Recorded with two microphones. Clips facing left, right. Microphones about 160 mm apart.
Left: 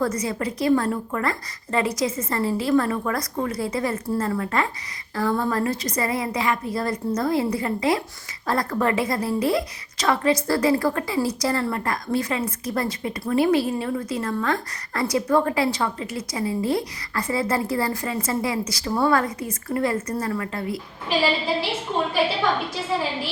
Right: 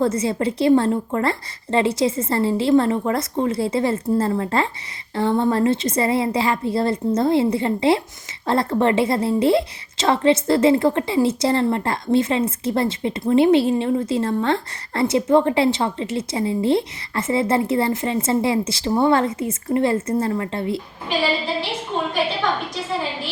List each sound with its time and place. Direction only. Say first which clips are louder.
0.0 s a woman's voice: right 5 dB; 25° right (ahead or behind)